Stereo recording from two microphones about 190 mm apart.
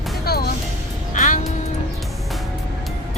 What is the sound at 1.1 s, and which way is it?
Music, 45° left (ahead or behind).